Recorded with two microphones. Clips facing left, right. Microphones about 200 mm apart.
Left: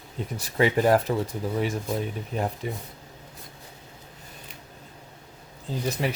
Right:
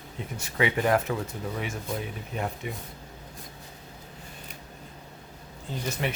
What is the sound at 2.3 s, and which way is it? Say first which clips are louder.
Speech: left 3 dB; 35° left (ahead or behind).